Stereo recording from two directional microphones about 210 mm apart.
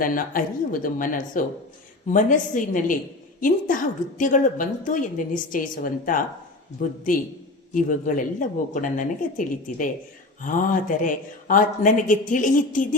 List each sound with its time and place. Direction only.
0.0 s speech: 40° left (ahead or behind)
4.2 s speech: 40° left (ahead or behind)